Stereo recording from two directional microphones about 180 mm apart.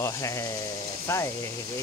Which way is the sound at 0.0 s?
15° left (ahead or behind).